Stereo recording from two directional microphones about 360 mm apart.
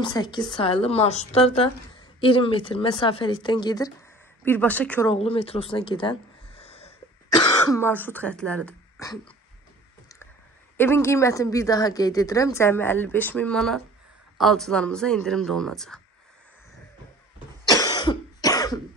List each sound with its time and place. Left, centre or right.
0.0 s speech: centre
5.1 s speech: centre
10.8 s speech: centre
17.6 s cough: centre